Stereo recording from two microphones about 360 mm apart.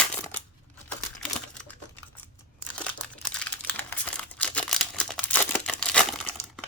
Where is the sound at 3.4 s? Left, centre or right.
Centre.